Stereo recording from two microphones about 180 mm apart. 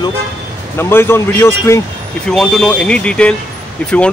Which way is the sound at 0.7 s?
15° left (ahead or behind).